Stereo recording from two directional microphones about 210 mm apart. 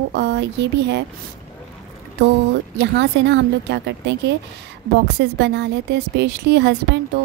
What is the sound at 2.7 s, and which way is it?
A woman's voice, 55° right (ahead or behind).